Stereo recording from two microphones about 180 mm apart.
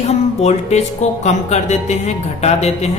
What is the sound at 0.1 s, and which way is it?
Speech, 40° left (ahead or behind).